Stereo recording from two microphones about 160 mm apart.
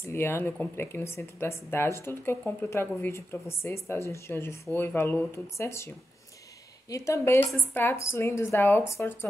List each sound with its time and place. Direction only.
0.0 s speech: 15° left (ahead or behind)